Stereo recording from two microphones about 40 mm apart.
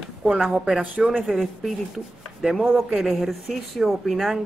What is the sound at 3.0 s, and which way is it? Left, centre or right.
Speech, centre.